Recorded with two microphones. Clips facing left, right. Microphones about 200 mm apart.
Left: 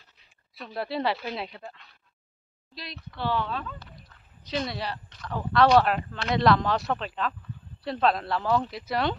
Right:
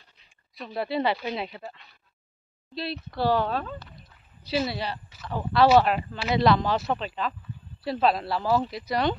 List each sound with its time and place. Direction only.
0.6 s speech: centre (ahead or behind)
2.7 s speech: 35° right (ahead or behind)
4.4 s speech: 10° right (ahead or behind)